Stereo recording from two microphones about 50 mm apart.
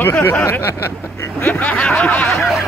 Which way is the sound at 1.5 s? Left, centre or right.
Left.